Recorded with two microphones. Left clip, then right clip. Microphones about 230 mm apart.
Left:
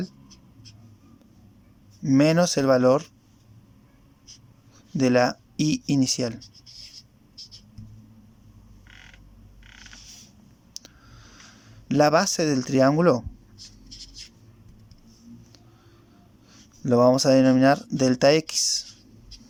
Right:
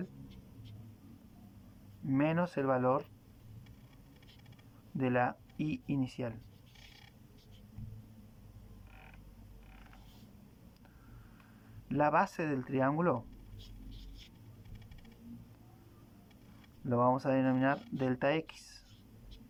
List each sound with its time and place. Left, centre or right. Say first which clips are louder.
2.0 s speech: left 13 dB; left
4.9 s speech: left 12 dB; left
11.9 s speech: left 10 dB; left
16.8 s speech: left 12 dB; left